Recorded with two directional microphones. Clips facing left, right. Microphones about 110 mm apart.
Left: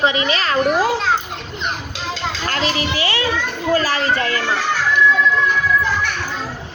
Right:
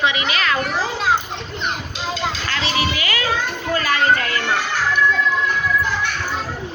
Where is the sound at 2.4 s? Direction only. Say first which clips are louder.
Left 4 dB; 45° left (ahead or behind).